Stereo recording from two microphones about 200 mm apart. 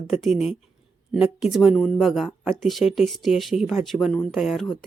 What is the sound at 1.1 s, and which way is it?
Speech, 5° right (ahead or behind).